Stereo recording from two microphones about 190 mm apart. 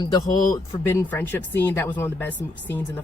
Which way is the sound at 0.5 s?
10° left (ahead or behind).